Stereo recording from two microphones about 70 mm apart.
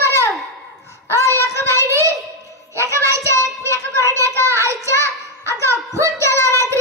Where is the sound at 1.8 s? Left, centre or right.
Right.